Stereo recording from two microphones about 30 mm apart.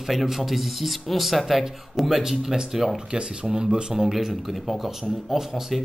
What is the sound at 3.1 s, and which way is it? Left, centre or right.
Speech, right.